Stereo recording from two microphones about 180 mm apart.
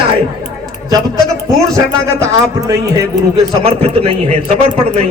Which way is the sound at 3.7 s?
30° right (ahead or behind).